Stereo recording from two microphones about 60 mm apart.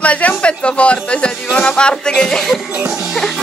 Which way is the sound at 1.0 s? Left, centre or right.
Centre.